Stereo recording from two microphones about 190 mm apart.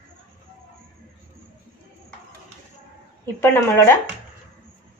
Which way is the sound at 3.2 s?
15° left (ahead or behind).